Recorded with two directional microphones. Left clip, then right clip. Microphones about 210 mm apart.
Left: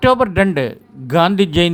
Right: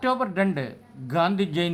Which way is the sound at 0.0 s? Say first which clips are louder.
Left 11 dB; 30° left (ahead or behind).